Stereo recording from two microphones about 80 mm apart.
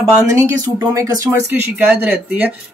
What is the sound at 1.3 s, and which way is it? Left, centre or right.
Speech, right.